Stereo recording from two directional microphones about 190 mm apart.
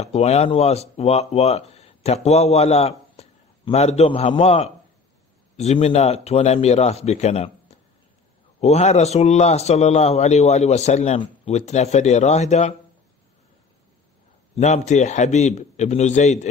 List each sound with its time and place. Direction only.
0.0 s a man's voice: 35° left (ahead or behind)
14.6 s a man's voice: 35° left (ahead or behind)